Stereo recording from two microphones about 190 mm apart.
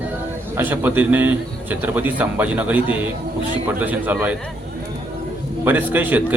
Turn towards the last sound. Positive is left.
turn(degrees=-10)  # may be behind; listen again after turning